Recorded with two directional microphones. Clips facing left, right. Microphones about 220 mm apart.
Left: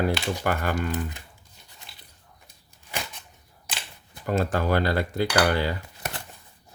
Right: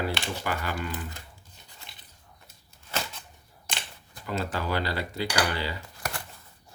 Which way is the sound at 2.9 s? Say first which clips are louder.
Right 1 dB; 15° left (ahead or behind).